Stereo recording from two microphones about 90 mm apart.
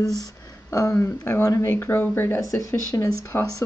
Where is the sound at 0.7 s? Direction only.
35° left (ahead or behind).